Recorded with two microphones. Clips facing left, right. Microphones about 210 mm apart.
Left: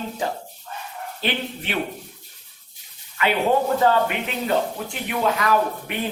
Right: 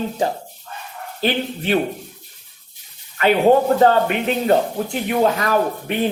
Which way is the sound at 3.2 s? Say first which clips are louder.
Right 6 dB; 40° right (ahead or behind).